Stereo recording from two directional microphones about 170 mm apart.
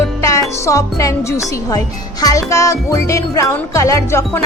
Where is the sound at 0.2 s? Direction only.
20° left (ahead or behind).